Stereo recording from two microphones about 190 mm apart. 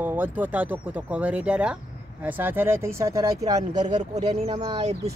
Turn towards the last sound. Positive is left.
turn(degrees=-20)  # may be behind; listen again after turning